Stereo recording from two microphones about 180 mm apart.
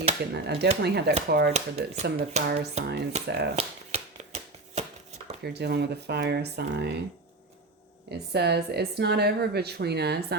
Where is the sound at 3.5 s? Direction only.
35° right (ahead or behind).